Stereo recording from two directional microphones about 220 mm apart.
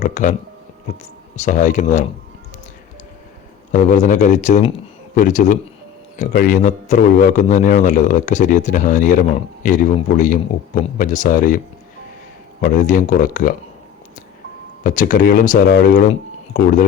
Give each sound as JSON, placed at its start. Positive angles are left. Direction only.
{"t": 0.0, "sound": "a sound", "side_deg": 35}
{"t": 1.4, "sound": "a man's voice", "side_deg": 35}
{"t": 3.7, "sound": "a man's voice", "side_deg": 35}
{"t": 12.6, "sound": "a man's voice", "side_deg": 35}
{"t": 14.8, "sound": "a man's voice", "side_deg": 35}